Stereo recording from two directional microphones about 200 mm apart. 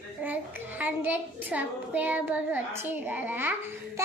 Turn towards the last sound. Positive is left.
turn(degrees=-10)  # may be behind; listen again after turning